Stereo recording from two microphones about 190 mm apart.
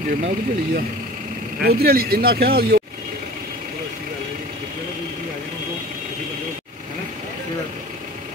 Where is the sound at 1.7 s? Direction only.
55° right (ahead or behind).